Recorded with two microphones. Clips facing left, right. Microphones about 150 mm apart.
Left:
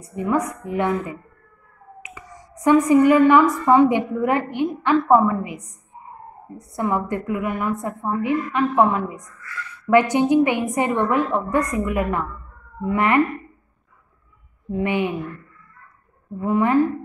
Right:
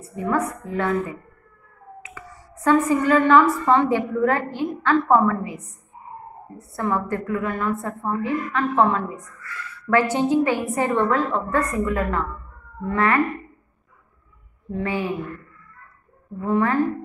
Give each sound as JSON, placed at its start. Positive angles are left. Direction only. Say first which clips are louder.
{"t": 0.0, "sound": "a woman's voice", "louder": "left 1 dB", "side_deg": 15}
{"t": 2.0, "sound": "a woman's voice", "louder": "even", "side_deg": 15}
{"t": 14.7, "sound": "speech", "louder": "left 3 dB", "side_deg": 15}
{"t": 16.3, "sound": "a woman's voice", "louder": "left 2 dB", "side_deg": 15}